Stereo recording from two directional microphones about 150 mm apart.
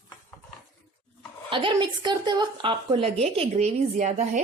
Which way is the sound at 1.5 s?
35° right (ahead or behind).